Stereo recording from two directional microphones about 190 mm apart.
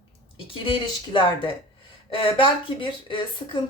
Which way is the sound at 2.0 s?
25° left (ahead or behind).